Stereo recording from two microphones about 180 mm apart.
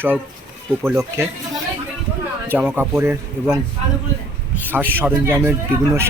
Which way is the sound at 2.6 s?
10° right (ahead or behind).